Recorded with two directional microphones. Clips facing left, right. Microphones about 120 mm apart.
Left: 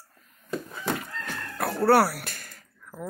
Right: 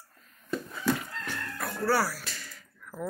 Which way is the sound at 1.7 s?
65° left (ahead or behind).